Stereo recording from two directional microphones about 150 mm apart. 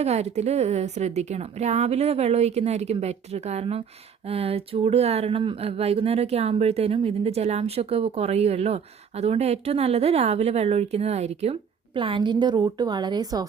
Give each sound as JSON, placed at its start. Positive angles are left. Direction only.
{"t": 0.0, "sound": "speech", "side_deg": -45}
{"t": 11.9, "sound": "a woman's voice", "side_deg": -35}